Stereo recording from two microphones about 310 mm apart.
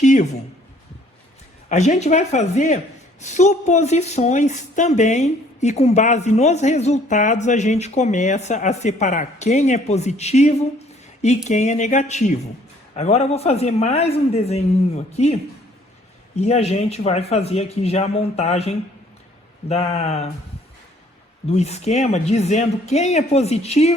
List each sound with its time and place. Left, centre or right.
0.0 s a sound: left
1.7 s a woman's voice: left
21.4 s a woman's voice: left